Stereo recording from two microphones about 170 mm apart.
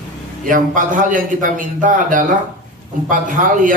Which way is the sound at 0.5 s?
50° right (ahead or behind).